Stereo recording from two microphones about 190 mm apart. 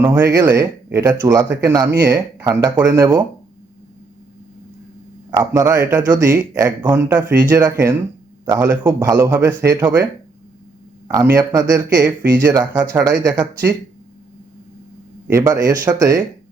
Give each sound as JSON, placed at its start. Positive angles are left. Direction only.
{"t": 0.0, "sound": "speech", "side_deg": -15}
{"t": 5.4, "sound": "speech", "side_deg": -15}
{"t": 11.1, "sound": "speech", "side_deg": -15}
{"t": 15.3, "sound": "speech", "side_deg": -15}